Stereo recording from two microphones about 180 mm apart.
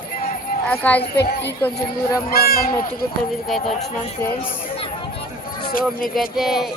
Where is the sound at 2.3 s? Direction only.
55° left (ahead or behind).